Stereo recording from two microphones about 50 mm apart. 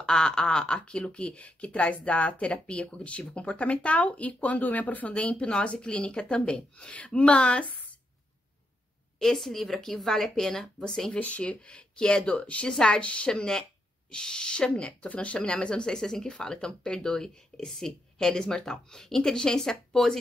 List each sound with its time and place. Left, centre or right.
0.0 s speech: centre; by 7.9 s left
9.2 s speech: centre
11.1 s speech: left
13.3 s speech: centre